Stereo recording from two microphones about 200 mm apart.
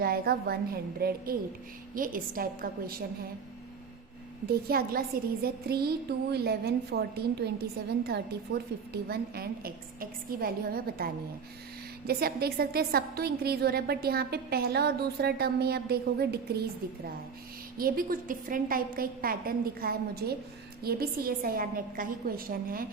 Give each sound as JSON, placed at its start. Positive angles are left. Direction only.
{"t": 0.0, "sound": "a woman's voice", "side_deg": -50}
{"t": 4.4, "sound": "a woman's voice", "side_deg": -50}
{"t": 17.7, "sound": "a woman's voice", "side_deg": -45}